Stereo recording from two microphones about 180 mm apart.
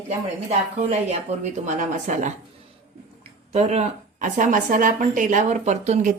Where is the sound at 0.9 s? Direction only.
35° right (ahead or behind).